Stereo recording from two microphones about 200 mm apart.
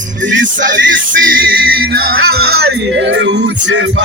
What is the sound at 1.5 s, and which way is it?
Music, 50° right (ahead or behind).